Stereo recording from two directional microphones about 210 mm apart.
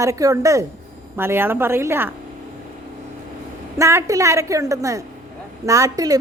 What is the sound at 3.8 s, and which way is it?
A woman's voice, 15° right (ahead or behind).